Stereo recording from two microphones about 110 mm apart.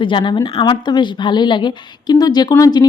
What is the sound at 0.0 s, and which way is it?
A woman's voice, 50° left (ahead or behind).